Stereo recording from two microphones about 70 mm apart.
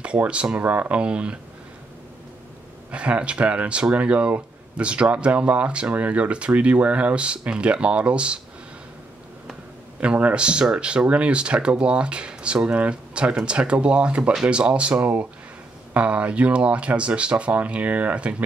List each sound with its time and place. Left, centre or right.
0.0 s speech: centre
2.9 s speech: centre
9.9 s speech: centre